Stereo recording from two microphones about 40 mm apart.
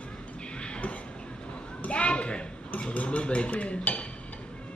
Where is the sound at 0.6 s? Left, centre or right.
Left.